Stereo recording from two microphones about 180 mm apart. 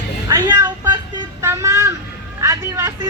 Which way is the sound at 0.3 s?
15° right (ahead or behind).